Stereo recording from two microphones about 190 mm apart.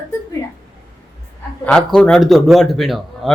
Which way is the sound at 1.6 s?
5° left (ahead or behind).